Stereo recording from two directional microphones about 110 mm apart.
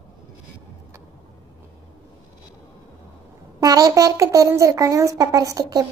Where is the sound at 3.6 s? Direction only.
35° right (ahead or behind).